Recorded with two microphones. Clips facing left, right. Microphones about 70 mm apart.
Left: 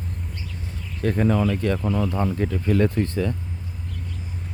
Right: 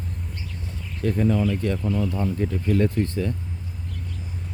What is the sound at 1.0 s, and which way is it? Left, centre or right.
Speech, left.